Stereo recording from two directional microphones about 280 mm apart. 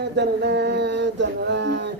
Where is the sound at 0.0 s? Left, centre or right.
Right.